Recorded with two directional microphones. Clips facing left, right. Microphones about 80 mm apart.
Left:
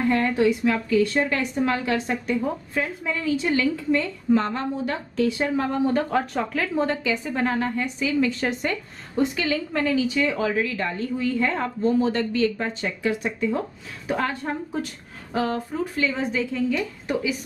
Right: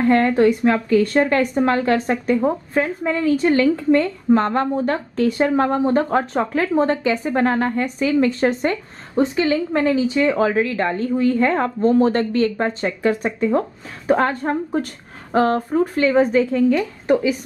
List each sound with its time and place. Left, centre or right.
0.0 s a woman's voice: right